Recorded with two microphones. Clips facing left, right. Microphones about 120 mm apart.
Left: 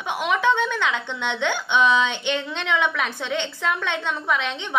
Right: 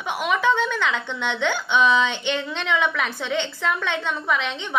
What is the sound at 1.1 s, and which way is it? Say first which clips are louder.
Speech: right 1 dB; 20° left (ahead or behind).